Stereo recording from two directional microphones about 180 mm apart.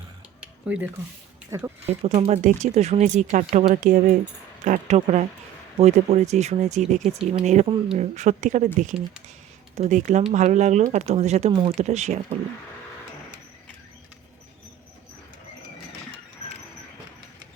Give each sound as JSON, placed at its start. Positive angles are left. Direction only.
{"t": 1.5, "sound": "speech", "side_deg": -15}
{"t": 1.9, "sound": "speech", "side_deg": -35}
{"t": 9.7, "sound": "speech", "side_deg": -40}